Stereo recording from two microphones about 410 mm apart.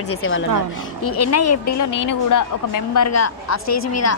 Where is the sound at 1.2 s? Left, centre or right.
Left.